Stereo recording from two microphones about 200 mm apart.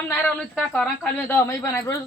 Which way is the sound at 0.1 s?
5° left (ahead or behind).